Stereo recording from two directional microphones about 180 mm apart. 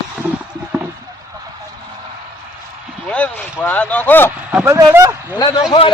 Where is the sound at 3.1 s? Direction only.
10° left (ahead or behind).